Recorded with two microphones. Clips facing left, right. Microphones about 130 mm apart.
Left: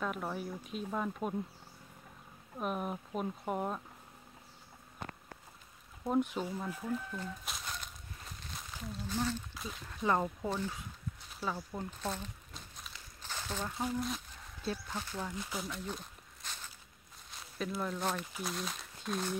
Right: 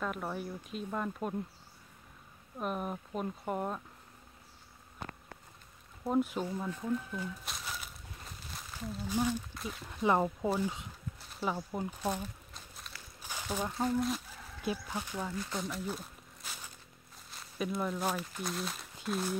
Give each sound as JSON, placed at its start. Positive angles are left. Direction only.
{"t": 0.0, "sound": "speech", "side_deg": 0}
{"t": 2.6, "sound": "speech", "side_deg": 0}
{"t": 6.0, "sound": "crumpling", "side_deg": 0}
{"t": 9.1, "sound": "speech", "side_deg": -10}
{"t": 9.5, "sound": "a sound", "side_deg": 0}
{"t": 10.0, "sound": "speech", "side_deg": -15}
{"t": 12.5, "sound": "a sound", "side_deg": 0}
{"t": 13.2, "sound": "a sound", "side_deg": -10}
{"t": 13.7, "sound": "speech", "side_deg": 0}
{"t": 14.6, "sound": "speech", "side_deg": -10}
{"t": 15.5, "sound": "speech", "side_deg": 0}
{"t": 15.8, "sound": "walk", "side_deg": -5}
{"t": 17.6, "sound": "speech", "side_deg": -5}